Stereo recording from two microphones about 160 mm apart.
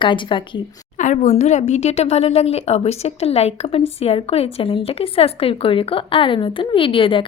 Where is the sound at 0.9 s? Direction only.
50° left (ahead or behind); by 7.2 s 35° left (ahead or behind).